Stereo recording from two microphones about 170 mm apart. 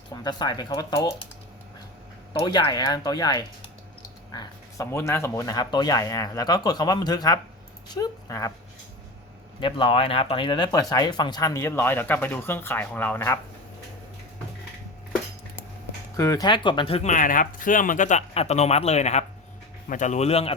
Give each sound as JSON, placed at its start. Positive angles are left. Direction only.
{"t": 0.1, "sound": "speech", "side_deg": 25}
{"t": 2.3, "sound": "speech", "side_deg": 25}
{"t": 9.6, "sound": "speech", "side_deg": 30}
{"t": 16.1, "sound": "speech", "side_deg": 20}